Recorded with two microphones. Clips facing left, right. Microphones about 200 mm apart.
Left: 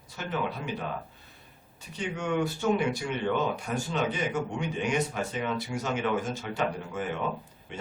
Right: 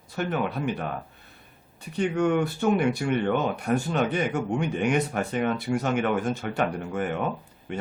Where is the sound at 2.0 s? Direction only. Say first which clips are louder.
Right 6 dB; 55° right (ahead or behind).